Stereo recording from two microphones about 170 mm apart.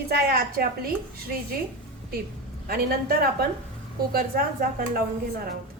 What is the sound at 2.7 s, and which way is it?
A woman's voice, 65° right (ahead or behind).